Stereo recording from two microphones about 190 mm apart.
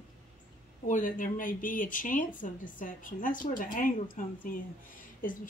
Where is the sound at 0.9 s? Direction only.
45° left (ahead or behind).